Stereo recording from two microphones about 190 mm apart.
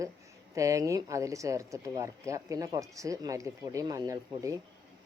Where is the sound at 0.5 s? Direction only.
15° right (ahead or behind).